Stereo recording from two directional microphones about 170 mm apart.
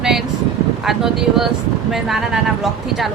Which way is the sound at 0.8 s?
Centre (ahead or behind).